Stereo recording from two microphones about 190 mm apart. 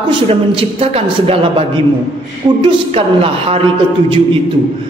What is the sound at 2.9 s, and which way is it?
Speech, 30° right (ahead or behind).